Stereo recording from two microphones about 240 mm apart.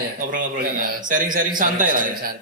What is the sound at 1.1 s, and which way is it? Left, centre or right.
A man's voice, right.